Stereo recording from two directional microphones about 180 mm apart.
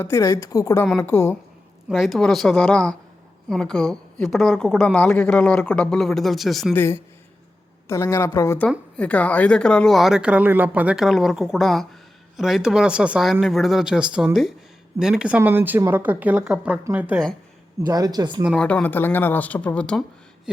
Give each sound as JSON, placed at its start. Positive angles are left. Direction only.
{"t": 0.0, "sound": "speech", "side_deg": 15}
{"t": 1.9, "sound": "a woman's voice", "side_deg": 0}
{"t": 6.7, "sound": "a woman's voice", "side_deg": 15}
{"t": 17.8, "sound": "speech", "side_deg": -20}
{"t": 18.4, "sound": "speech", "side_deg": 5}